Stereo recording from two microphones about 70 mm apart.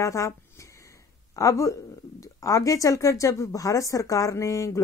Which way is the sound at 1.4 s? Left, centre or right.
Left.